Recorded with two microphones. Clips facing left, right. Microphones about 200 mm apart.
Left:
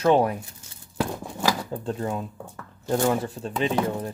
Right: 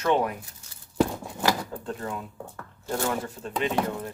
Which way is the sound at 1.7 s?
25° left (ahead or behind).